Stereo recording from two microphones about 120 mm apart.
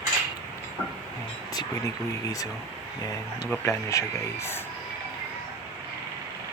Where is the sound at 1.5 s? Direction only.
30° left (ahead or behind).